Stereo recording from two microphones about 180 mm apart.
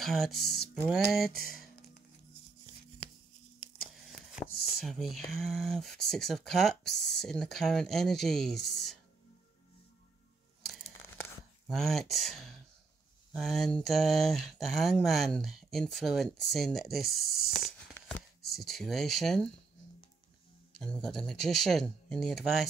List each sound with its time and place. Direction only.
0.0 s speech: centre (ahead or behind)
3.8 s a sound: centre (ahead or behind)
4.7 s speech: centre (ahead or behind)
11.6 s speech: centre (ahead or behind)
17.9 s a sound: 10° left (ahead or behind)
18.6 s speech: centre (ahead or behind)
20.8 s speech: 5° left (ahead or behind)